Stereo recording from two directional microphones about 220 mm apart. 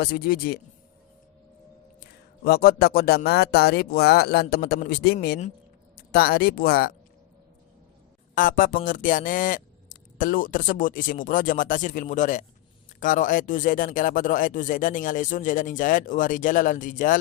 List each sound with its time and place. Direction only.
0.0 s speech: 45° left (ahead or behind)
2.0 s speech: 45° left (ahead or behind)
8.4 s speech: 40° left (ahead or behind)